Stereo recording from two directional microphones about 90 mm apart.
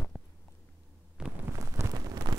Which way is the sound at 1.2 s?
10° right (ahead or behind).